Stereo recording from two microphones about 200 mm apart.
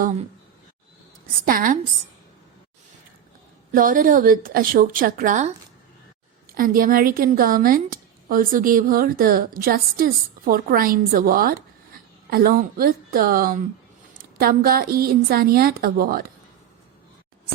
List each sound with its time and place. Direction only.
1.5 s a woman's voice: 45° right (ahead or behind)
3.7 s a woman's voice: 40° right (ahead or behind)